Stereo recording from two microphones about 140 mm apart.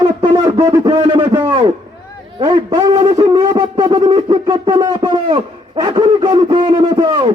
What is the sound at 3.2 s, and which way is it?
Wind instrument, 30° right (ahead or behind).